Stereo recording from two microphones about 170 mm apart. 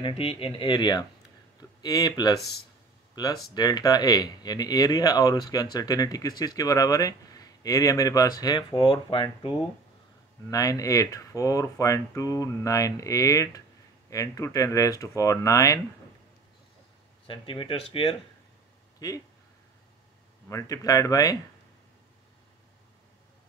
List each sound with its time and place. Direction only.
0.0 s speech: 35° left (ahead or behind)
10.5 s speech: 20° left (ahead or behind)
17.3 s speech: 30° left (ahead or behind)
18.9 s speech: 20° left (ahead or behind)
20.4 s speech: 20° left (ahead or behind)